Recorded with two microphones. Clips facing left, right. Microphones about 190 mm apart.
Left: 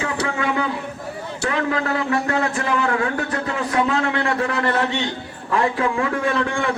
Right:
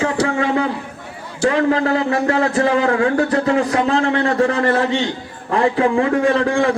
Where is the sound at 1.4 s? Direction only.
35° right (ahead or behind).